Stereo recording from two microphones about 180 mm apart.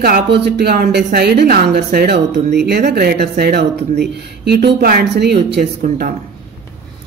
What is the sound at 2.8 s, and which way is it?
Speech, 55° right (ahead or behind).